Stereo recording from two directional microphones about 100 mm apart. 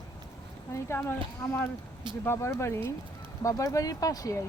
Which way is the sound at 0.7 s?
25° left (ahead or behind).